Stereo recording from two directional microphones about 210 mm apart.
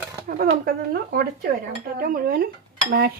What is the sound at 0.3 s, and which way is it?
Speech, 45° right (ahead or behind).